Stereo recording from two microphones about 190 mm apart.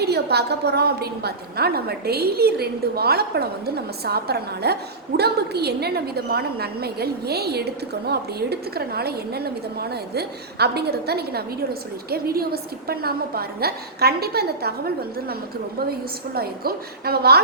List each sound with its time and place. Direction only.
0.0 s a woman's voice: 60° right (ahead or behind)